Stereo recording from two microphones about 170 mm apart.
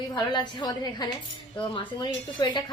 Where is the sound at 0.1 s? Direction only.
25° left (ahead or behind).